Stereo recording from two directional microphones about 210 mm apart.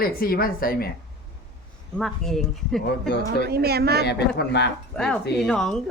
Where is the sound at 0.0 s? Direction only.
45° left (ahead or behind).